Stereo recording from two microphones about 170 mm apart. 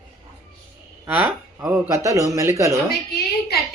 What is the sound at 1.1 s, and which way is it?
Speech, 10° right (ahead or behind).